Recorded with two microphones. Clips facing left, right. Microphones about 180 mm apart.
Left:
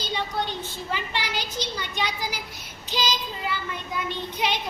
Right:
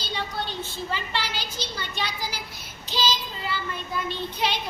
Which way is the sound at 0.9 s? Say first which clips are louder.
Left 3 dB; 15° left (ahead or behind).